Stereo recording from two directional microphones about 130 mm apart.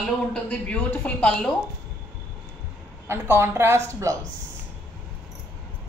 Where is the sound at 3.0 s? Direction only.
20° right (ahead or behind).